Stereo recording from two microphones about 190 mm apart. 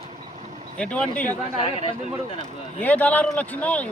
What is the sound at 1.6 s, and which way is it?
Speech, 30° left (ahead or behind).